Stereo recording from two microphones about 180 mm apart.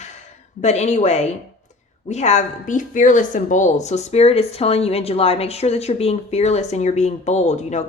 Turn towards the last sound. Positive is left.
turn(degrees=40)  # may be behind; listen again after turning